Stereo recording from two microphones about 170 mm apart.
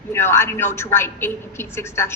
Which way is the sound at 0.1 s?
15° left (ahead or behind).